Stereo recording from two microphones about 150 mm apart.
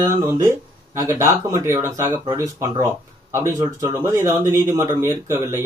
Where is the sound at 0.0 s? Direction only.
20° right (ahead or behind).